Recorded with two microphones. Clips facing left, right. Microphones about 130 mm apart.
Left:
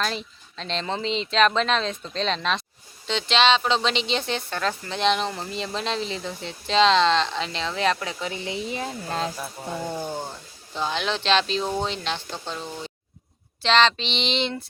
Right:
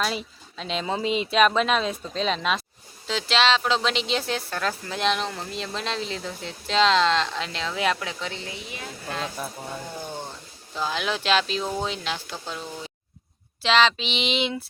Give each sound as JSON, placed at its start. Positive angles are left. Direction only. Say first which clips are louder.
{"t": 0.0, "sound": "speech", "louder": "right 1 dB", "side_deg": -5}
{"t": 8.7, "sound": "speech", "louder": "left 5 dB", "side_deg": 35}
{"t": 10.0, "sound": "speech", "louder": "left 4 dB", "side_deg": 10}
{"t": 10.8, "sound": "speech", "louder": "left 1 dB", "side_deg": -5}
{"t": 13.6, "sound": "speech", "louder": "left 1 dB", "side_deg": -5}